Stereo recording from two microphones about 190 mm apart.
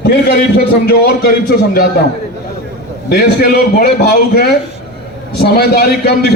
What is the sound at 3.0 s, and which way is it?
A man's voice, 55° left (ahead or behind).